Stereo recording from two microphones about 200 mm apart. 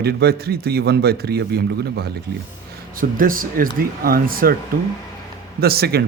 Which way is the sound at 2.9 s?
45° right (ahead or behind).